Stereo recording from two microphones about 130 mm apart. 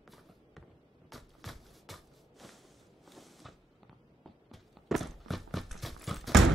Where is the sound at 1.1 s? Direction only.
Centre (ahead or behind).